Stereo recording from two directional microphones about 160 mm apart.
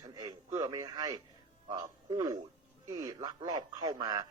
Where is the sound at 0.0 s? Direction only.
25° right (ahead or behind).